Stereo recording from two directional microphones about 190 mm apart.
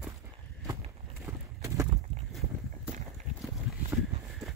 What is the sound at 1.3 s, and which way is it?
Horse, 15° right (ahead or behind).